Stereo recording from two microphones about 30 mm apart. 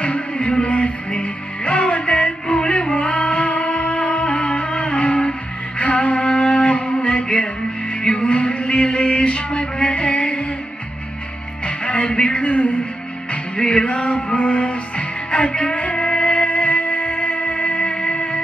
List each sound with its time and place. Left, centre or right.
0.0 s music: left
8.1 s a sound: left
11.6 s music: left
12.4 s a sound: left
13.6 s music: left
14.0 s music: left
16.5 s music: left